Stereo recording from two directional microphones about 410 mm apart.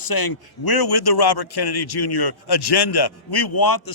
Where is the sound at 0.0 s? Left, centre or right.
Left.